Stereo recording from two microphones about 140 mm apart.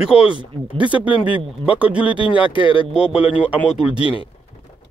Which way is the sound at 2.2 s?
35° left (ahead or behind).